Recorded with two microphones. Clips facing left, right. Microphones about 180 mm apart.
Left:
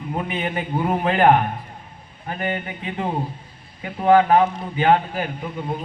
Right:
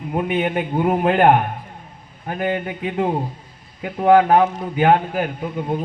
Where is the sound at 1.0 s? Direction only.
55° right (ahead or behind).